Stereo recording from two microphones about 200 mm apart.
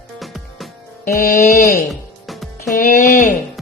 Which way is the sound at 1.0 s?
40° left (ahead or behind).